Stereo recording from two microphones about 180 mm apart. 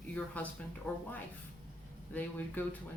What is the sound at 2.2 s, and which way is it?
Speech, 10° left (ahead or behind).